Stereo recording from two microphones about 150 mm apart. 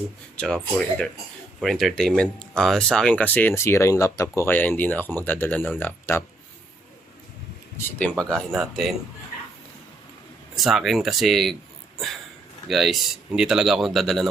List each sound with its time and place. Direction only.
0.3 s speech: 5° left (ahead or behind)
8.2 s speech: 5° left (ahead or behind)
10.6 s speech: centre (ahead or behind)
12.6 s speech: centre (ahead or behind)